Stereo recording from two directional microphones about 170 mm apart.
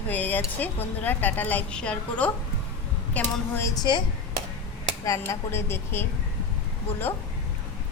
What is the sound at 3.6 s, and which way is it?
Speech, 20° left (ahead or behind).